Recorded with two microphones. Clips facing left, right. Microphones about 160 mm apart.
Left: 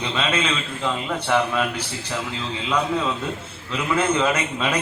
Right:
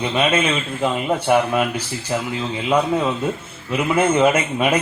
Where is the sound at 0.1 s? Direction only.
20° right (ahead or behind).